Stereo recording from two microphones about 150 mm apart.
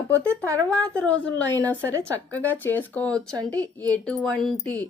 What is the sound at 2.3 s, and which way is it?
Speech, 10° left (ahead or behind).